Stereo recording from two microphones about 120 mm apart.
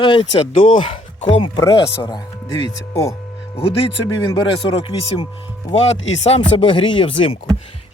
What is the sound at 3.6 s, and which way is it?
Speech, 55° left (ahead or behind).